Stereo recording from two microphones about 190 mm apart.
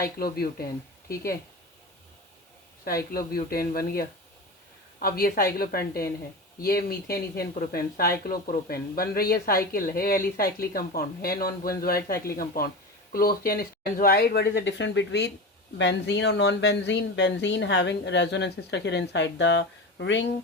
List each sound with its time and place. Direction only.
0.0 s speech: 50° left (ahead or behind)
2.8 s speech: 50° left (ahead or behind); by 20.2 s 70° left (ahead or behind)